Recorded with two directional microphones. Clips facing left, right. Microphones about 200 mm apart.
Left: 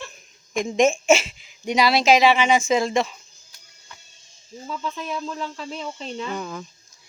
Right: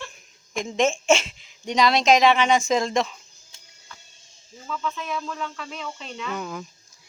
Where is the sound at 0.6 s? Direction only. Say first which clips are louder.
Left 4 dB; 15° left (ahead or behind).